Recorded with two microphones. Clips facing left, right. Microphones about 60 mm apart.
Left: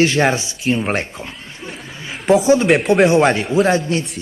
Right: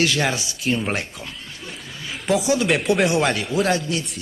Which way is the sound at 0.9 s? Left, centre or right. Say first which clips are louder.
Left 5 dB; left.